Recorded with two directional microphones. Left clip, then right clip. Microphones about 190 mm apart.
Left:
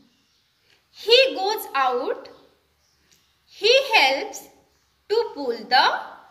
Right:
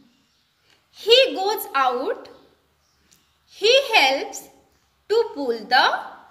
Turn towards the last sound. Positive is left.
turn(degrees=-40)  # may be behind; listen again after turning